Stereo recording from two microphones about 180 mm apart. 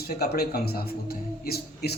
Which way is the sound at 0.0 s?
60° left (ahead or behind).